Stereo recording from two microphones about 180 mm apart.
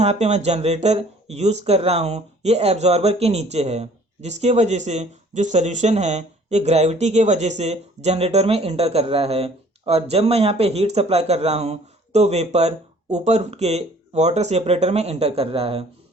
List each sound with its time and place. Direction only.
0.0 s speech: 35° right (ahead or behind)